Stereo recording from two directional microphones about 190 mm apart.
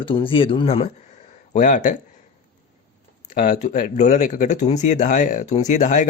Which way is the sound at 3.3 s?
40° left (ahead or behind).